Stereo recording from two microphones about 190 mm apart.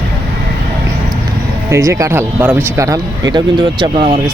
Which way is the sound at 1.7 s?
15° right (ahead or behind).